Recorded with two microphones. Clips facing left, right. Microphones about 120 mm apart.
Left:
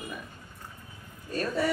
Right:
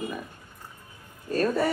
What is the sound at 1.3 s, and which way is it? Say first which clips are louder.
Speech: right 5 dB; 45° right (ahead or behind).